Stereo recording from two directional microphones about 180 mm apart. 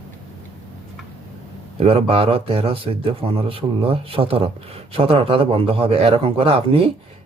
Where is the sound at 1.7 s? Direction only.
30° right (ahead or behind).